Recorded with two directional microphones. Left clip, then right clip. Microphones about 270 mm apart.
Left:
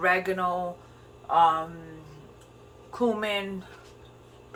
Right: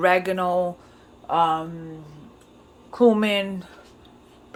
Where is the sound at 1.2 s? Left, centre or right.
Right.